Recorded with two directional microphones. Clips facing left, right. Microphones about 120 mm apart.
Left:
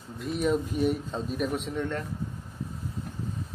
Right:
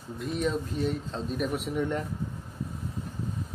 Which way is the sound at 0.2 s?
5° left (ahead or behind).